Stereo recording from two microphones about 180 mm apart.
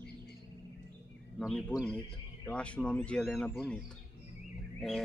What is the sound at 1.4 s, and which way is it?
A man's voice, 5° left (ahead or behind).